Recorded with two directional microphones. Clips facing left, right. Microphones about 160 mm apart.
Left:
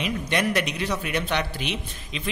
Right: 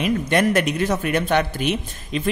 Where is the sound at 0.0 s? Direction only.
50° right (ahead or behind).